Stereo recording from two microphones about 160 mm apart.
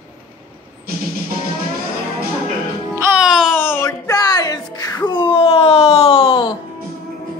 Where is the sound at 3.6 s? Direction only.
15° left (ahead or behind); by 6.5 s 30° left (ahead or behind).